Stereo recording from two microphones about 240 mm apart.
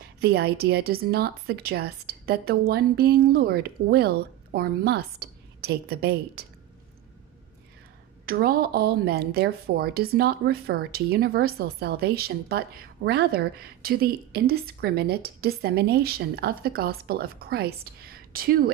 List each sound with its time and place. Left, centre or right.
0.2 s a woman's voice: right
8.3 s a woman's voice: right